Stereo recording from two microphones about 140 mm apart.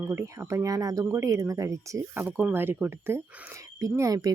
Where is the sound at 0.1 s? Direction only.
20° right (ahead or behind).